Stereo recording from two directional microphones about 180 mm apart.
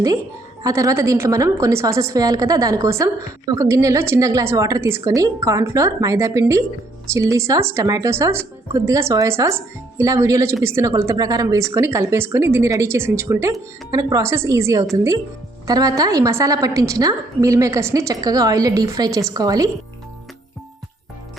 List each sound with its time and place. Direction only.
0.6 s a woman's voice: 20° right (ahead or behind)